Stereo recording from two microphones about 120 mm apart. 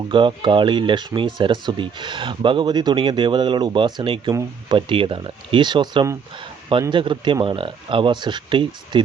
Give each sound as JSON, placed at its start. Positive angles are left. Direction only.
{"t": 0.1, "sound": "speech", "side_deg": -45}